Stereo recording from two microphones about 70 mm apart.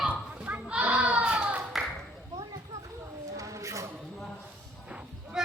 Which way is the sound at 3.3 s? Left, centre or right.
Right.